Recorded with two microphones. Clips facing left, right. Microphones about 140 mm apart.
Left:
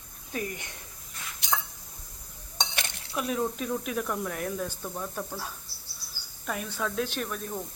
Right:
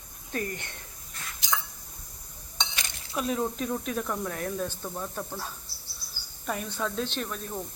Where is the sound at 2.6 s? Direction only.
55° left (ahead or behind).